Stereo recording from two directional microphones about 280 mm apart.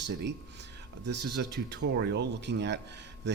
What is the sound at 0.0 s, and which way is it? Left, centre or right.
Speech, right.